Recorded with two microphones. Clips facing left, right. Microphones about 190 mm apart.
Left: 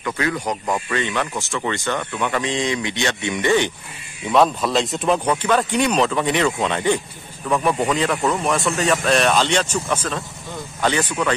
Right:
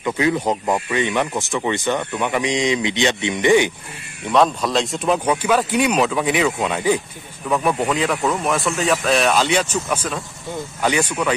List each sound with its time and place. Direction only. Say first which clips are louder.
0.0 s speech: right 4 dB; 20° right (ahead or behind)
4.2 s speech: even; centre (ahead or behind)